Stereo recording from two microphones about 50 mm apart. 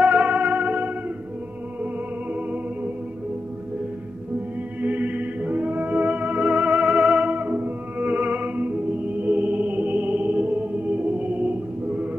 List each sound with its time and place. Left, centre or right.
0.0 s music: right
2.3 s music: right
4.8 s music: right
7.3 s music: right